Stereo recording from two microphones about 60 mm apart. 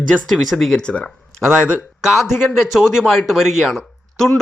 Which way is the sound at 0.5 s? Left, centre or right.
Centre.